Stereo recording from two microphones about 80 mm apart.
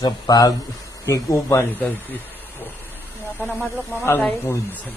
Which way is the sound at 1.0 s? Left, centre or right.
Left.